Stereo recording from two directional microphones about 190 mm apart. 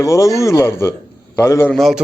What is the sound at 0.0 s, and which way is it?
Speech, 15° left (ahead or behind).